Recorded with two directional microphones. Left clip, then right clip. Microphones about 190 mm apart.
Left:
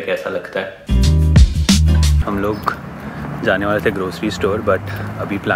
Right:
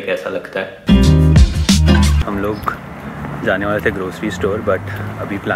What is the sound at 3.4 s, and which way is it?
Speech, 5° left (ahead or behind).